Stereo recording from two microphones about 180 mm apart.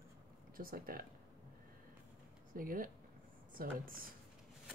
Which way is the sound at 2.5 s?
50° right (ahead or behind).